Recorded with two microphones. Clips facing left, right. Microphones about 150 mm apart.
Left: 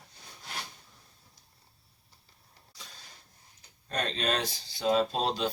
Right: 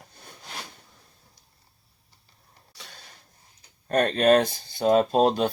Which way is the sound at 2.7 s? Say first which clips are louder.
Right 4 dB; 70° right (ahead or behind).